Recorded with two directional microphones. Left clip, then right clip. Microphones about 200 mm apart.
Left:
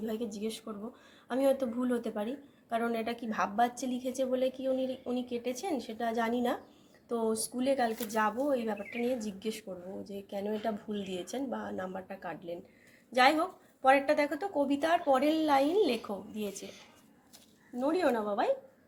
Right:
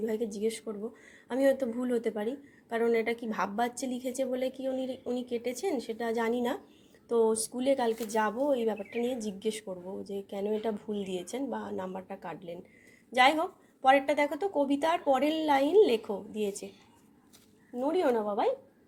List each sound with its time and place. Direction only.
0.0 s speech: 25° right (ahead or behind)
17.8 s speech: 20° right (ahead or behind)